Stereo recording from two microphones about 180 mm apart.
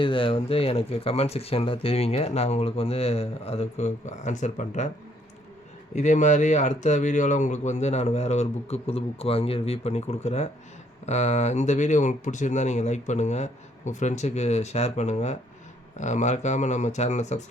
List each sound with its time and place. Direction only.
0.0 s speech: 30° left (ahead or behind)
5.9 s speech: 40° left (ahead or behind)